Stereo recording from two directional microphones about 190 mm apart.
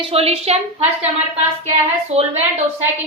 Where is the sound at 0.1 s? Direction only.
30° right (ahead or behind).